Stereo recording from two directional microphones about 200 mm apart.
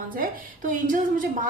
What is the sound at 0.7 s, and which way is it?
Speech, 40° right (ahead or behind).